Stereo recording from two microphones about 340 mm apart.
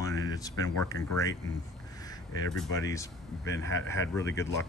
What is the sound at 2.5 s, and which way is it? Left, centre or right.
Speech, centre.